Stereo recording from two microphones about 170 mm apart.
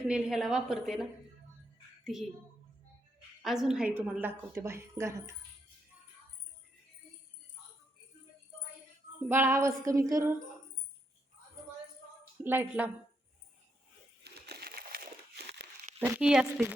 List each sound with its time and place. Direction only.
0.1 s a woman's voice: centre (ahead or behind)
3.4 s a woman's voice: centre (ahead or behind)
9.3 s a woman's voice: 15° right (ahead or behind)
12.4 s a woman's voice: 10° right (ahead or behind)
14.4 s crushing: 70° right (ahead or behind)
16.0 s a woman's voice: 10° right (ahead or behind)